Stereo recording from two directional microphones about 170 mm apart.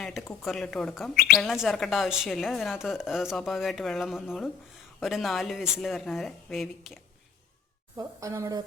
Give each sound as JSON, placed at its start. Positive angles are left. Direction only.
{"t": 0.0, "sound": "a sound", "side_deg": 0}
{"t": 0.4, "sound": "speech", "side_deg": 0}
{"t": 7.9, "sound": "a woman's voice", "side_deg": -20}